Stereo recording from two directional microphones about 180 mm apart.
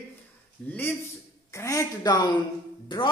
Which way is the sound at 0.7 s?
10° left (ahead or behind).